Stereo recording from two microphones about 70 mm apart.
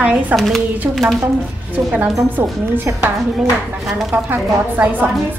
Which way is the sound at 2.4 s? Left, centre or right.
Right.